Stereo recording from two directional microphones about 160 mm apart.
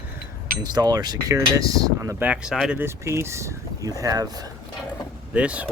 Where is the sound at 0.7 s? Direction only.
25° right (ahead or behind); by 2.8 s centre (ahead or behind).